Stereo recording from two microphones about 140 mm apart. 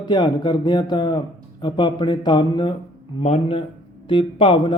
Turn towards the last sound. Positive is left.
turn(degrees=35)  # may be behind; listen again after turning